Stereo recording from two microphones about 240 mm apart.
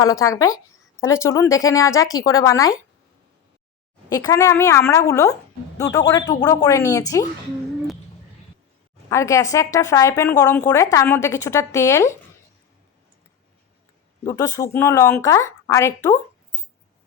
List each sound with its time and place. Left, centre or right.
0.0 s a woman's voice: centre
4.1 s a woman's voice: centre
9.0 s a woman's voice: centre
14.3 s a woman's voice: centre